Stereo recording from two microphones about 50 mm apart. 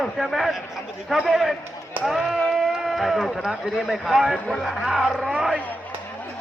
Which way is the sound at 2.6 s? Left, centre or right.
Centre.